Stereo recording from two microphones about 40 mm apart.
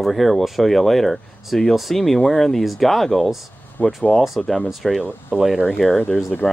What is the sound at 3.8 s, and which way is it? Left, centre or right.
Speech, left.